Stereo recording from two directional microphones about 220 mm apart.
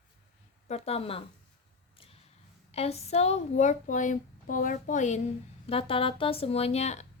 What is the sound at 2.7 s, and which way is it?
Speech, 30° left (ahead or behind).